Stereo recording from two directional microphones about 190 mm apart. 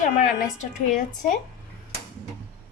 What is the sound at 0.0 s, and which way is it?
A woman's voice, 45° left (ahead or behind).